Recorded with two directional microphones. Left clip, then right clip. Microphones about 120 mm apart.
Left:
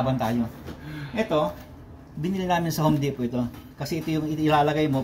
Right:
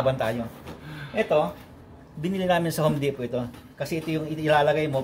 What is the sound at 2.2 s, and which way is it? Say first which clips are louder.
Speech: right 1 dB; 55° right (ahead or behind).